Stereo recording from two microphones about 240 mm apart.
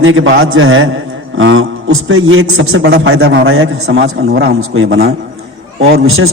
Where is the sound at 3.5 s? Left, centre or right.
Right.